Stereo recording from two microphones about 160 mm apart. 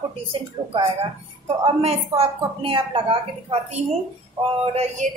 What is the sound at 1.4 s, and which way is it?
A woman's voice, 40° right (ahead or behind).